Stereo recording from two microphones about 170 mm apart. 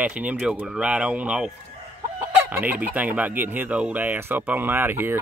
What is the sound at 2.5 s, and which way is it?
Speech, 10° right (ahead or behind).